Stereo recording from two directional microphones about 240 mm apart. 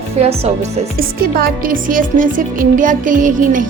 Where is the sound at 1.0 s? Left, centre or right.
Right.